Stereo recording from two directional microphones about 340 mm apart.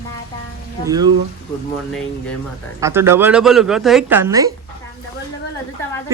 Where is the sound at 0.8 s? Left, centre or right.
Centre.